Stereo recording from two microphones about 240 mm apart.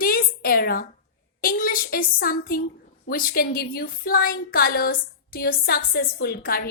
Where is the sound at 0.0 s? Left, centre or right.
Left.